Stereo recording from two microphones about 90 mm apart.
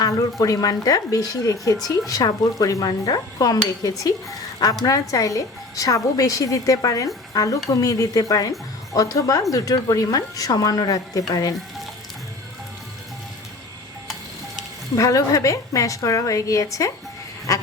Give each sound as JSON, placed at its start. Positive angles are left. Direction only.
{"t": 0.0, "sound": "speech", "side_deg": 40}
{"t": 0.9, "sound": "dishes", "side_deg": 45}
{"t": 4.9, "sound": "speech", "side_deg": 40}
{"t": 14.9, "sound": "speech", "side_deg": 40}